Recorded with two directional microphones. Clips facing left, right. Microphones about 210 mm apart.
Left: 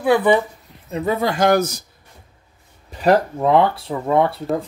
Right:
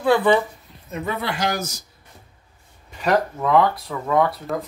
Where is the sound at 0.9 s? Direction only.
40° left (ahead or behind).